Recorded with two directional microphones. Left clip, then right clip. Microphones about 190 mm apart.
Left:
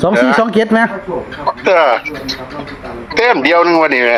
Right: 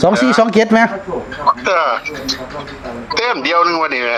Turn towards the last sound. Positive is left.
turn(degrees=15)  # may be behind; listen again after turning